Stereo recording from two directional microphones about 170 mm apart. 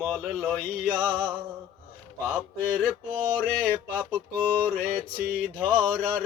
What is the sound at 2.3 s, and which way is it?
Mantra, 10° right (ahead or behind).